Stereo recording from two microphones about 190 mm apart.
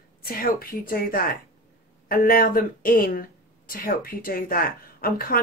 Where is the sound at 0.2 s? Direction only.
50° left (ahead or behind).